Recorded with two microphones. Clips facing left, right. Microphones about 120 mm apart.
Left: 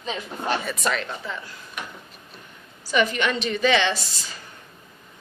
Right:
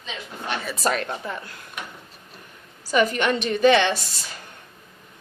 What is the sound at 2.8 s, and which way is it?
A woman's voice, 40° right (ahead or behind).